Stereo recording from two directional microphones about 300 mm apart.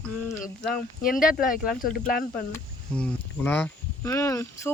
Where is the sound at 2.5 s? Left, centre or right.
Centre.